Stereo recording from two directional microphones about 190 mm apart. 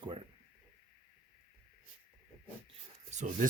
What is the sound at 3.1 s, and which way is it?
Speech, 40° right (ahead or behind).